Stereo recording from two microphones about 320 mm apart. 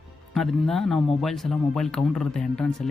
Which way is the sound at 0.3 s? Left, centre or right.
Centre.